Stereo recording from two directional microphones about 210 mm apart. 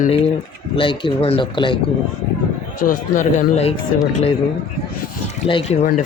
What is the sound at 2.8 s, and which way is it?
Speech, 40° left (ahead or behind).